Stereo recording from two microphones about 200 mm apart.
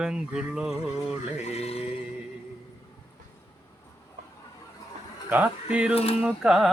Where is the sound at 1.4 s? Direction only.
30° left (ahead or behind).